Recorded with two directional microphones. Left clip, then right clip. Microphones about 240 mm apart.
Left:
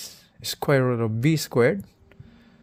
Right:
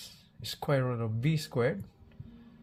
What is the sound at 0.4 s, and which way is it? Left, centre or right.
Speech, left.